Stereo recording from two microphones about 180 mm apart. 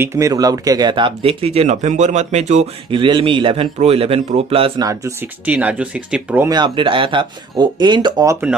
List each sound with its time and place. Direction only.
0.0 s speech: 15° right (ahead or behind); by 2.7 s 40° right (ahead or behind)
2.9 s a man's voice: 25° right (ahead or behind)
5.4 s speech: 10° right (ahead or behind)
6.5 s a man's voice: 25° right (ahead or behind)